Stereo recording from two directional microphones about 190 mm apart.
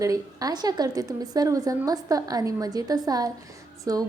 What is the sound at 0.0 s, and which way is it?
A woman's voice, 20° right (ahead or behind).